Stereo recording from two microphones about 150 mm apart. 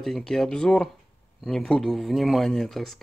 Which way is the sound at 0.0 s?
Centre (ahead or behind).